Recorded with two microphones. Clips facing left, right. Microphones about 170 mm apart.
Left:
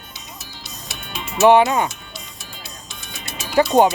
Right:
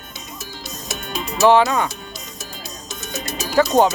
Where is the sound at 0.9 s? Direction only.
40° right (ahead or behind).